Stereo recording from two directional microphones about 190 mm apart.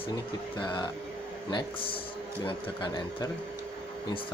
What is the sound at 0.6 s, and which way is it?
Speech, 25° left (ahead or behind).